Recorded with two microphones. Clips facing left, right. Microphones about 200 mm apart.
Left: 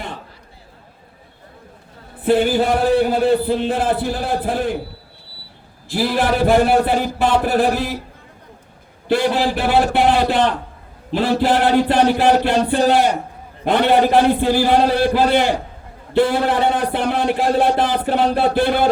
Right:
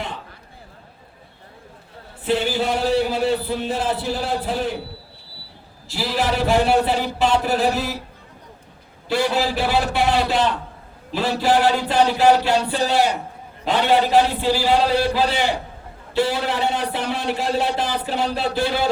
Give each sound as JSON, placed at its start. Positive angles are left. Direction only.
{"t": 2.2, "sound": "speech", "side_deg": 55}
{"t": 5.9, "sound": "speech", "side_deg": 55}
{"t": 9.0, "sound": "speech", "side_deg": 55}